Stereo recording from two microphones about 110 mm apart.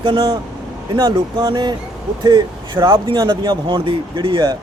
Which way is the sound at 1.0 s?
45° right (ahead or behind).